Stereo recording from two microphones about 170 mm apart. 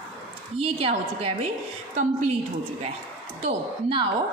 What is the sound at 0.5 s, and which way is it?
Speech, 35° right (ahead or behind).